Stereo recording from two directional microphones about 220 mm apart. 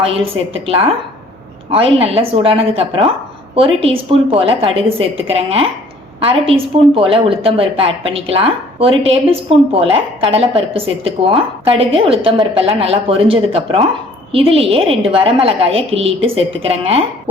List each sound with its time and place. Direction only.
1.7 s a woman's voice: 25° right (ahead or behind)